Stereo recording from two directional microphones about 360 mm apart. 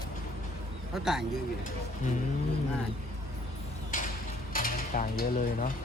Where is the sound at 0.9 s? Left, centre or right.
Centre.